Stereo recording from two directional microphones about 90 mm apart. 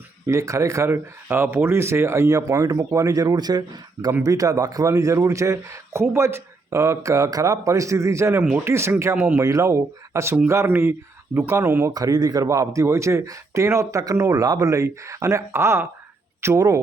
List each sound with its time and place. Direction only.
0.3 s a man's voice: 35° right (ahead or behind); by 3.6 s 50° right (ahead or behind)
4.2 s a man's voice: 40° right (ahead or behind)
9.1 s speech: 20° right (ahead or behind)
9.4 s a man's voice: 35° right (ahead or behind)
11.9 s a man's voice: 45° right (ahead or behind)
16.6 s a man's voice: 40° right (ahead or behind)